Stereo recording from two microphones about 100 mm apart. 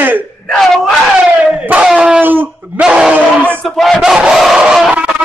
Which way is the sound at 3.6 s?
Centre (ahead or behind).